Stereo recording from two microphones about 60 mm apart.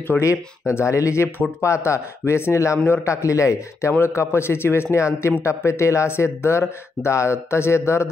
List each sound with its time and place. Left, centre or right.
0.2 s speech: left
4.9 s speech: left